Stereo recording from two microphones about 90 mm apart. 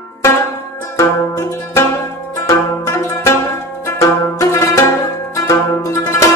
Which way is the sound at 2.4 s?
30° left (ahead or behind).